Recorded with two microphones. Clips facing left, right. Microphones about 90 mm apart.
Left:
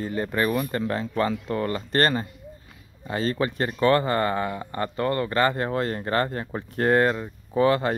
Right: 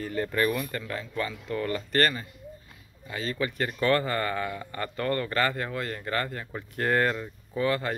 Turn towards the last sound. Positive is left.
turn(degrees=30)  # may be behind; listen again after turning